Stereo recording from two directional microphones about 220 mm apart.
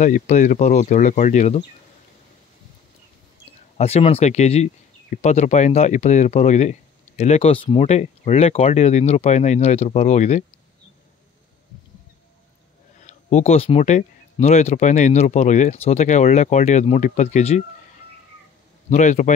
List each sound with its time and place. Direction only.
0.0 s speech: 35° left (ahead or behind)
3.7 s speech: 25° left (ahead or behind)
13.0 s speech: 30° left (ahead or behind)
18.9 s speech: 35° left (ahead or behind)